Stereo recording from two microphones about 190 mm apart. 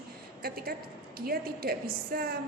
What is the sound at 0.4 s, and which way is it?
A woman's voice, 50° right (ahead or behind).